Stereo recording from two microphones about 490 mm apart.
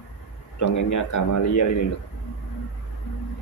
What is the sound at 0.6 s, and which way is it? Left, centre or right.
A man's voice, left.